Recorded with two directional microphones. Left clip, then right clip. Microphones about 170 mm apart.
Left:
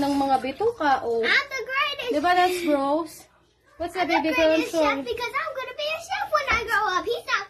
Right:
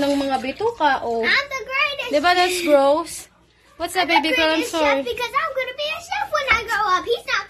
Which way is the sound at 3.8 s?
20° right (ahead or behind).